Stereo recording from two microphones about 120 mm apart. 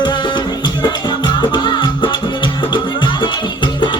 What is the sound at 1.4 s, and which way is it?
Music, 40° left (ahead or behind).